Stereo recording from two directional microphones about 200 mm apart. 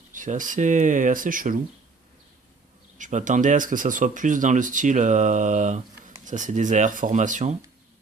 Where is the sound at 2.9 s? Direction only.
40° right (ahead or behind).